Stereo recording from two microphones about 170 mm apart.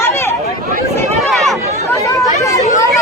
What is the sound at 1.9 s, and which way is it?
Chatter, 20° left (ahead or behind).